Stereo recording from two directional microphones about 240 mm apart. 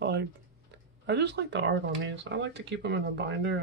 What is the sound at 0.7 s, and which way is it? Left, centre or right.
Speech, right.